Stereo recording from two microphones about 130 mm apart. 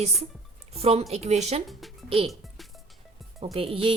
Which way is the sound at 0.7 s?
50° right (ahead or behind).